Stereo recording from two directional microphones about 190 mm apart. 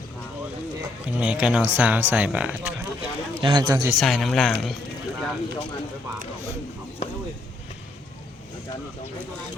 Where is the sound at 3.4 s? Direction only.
25° right (ahead or behind).